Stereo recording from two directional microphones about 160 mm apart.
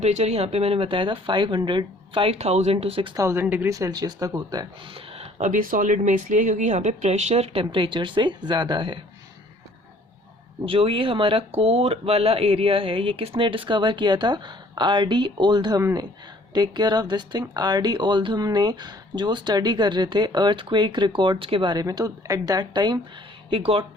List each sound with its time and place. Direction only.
0.0 s speech: 45° right (ahead or behind)
3.2 s speech: 15° right (ahead or behind)
4.9 s speech: 40° right (ahead or behind)
10.7 s speech: 35° right (ahead or behind)